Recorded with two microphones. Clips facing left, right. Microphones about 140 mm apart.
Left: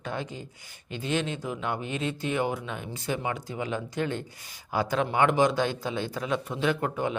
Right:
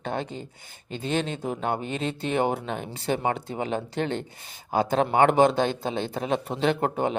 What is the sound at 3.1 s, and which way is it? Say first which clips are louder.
Speech: right 5 dB; 40° right (ahead or behind).